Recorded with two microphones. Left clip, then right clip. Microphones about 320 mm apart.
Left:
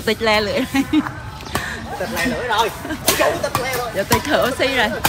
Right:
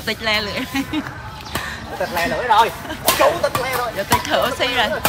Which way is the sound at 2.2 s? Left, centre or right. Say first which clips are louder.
Right 4 dB; centre.